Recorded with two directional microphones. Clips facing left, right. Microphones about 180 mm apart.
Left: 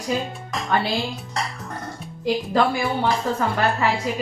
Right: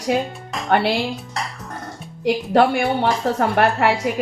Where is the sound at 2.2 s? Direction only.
70° right (ahead or behind).